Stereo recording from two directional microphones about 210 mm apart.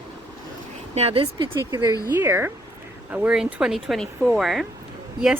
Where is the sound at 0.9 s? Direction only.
30° right (ahead or behind).